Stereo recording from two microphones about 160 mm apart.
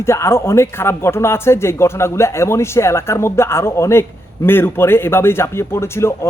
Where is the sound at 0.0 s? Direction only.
15° left (ahead or behind).